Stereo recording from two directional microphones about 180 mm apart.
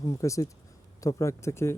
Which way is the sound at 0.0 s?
15° left (ahead or behind).